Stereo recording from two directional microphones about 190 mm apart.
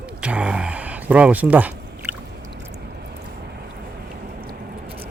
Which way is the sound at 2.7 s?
60° right (ahead or behind).